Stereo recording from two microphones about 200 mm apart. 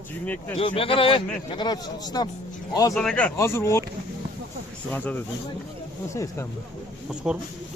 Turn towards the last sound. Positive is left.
turn(degrees=0)  # may be behind; listen again after turning